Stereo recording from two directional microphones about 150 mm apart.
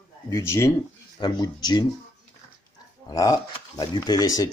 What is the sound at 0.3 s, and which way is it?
Speech, 20° left (ahead or behind).